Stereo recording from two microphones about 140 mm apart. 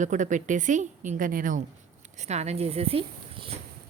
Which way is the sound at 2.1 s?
55° right (ahead or behind).